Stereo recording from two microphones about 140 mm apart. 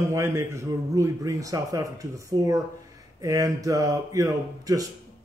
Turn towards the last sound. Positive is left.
turn(degrees=-25)  # may be behind; listen again after turning